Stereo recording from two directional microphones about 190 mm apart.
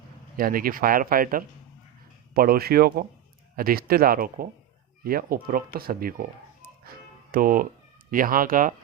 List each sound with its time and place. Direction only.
0.3 s speech: 50° right (ahead or behind)
6.8 s music: 50° right (ahead or behind)
8.1 s speech: 45° right (ahead or behind)